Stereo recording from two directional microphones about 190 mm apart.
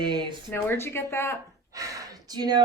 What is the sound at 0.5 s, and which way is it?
Speech, 10° left (ahead or behind).